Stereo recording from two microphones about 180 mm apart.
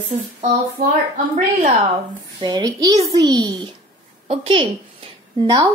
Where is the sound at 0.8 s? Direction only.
50° right (ahead or behind).